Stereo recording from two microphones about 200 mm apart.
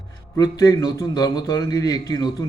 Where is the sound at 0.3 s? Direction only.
15° left (ahead or behind).